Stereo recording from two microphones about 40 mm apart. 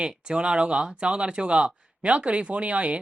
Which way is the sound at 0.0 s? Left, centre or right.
Right.